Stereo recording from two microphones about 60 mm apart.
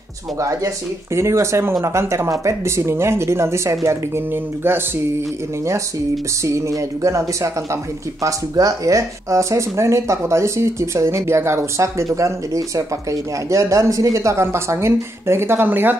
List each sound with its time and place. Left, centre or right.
0.4 s speech: right
6.4 s speech: right
14.4 s speech: right